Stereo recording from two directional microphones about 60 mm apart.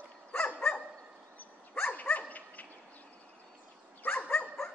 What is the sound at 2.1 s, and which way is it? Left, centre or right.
Dog, left.